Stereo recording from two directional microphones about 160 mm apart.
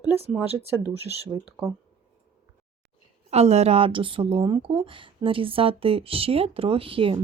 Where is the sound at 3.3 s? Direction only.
40° right (ahead or behind).